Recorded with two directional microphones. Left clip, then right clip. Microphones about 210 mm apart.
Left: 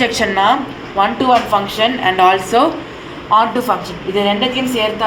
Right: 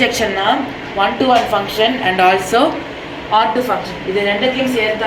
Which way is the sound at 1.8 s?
10° left (ahead or behind).